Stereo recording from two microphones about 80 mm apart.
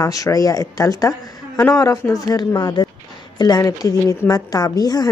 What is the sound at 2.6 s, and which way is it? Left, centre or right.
Speech, left.